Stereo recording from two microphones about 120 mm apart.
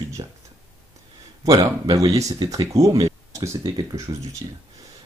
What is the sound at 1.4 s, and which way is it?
Speech, 30° right (ahead or behind).